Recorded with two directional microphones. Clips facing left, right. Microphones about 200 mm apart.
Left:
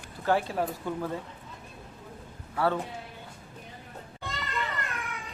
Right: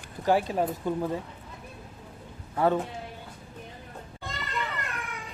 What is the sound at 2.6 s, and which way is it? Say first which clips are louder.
Speech: right 3 dB; 20° right (ahead or behind).